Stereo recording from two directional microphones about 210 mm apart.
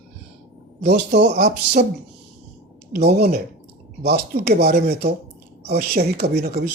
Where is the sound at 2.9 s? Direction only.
50° right (ahead or behind).